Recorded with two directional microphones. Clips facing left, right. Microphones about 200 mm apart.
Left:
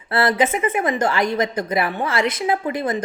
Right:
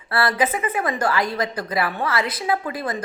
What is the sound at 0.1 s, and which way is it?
A woman's voice, 25° left (ahead or behind).